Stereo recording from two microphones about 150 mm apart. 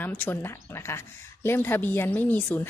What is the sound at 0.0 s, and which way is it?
A woman's voice, 10° left (ahead or behind).